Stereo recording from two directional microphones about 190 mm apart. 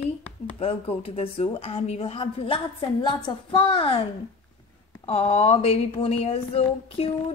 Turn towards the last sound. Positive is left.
turn(degrees=30)  # may be behind; listen again after turning